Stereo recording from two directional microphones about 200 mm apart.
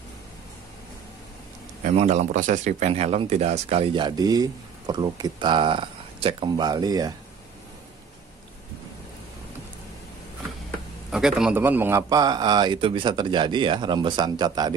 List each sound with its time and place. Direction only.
1.8 s a man's voice: 35° right (ahead or behind); by 7.2 s 20° right (ahead or behind)
11.1 s a man's voice: centre (ahead or behind); by 14.8 s 20° right (ahead or behind)